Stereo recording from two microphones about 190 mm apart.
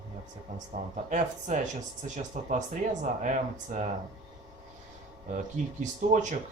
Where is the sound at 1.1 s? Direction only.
40° right (ahead or behind).